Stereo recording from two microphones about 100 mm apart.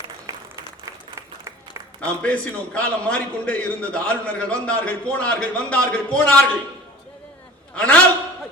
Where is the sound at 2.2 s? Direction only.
10° left (ahead or behind).